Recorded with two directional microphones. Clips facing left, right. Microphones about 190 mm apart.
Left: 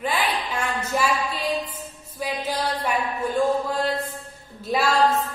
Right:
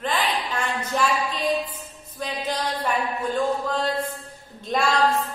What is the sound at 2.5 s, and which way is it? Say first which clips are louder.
Speech: right 1 dB; 10° left (ahead or behind).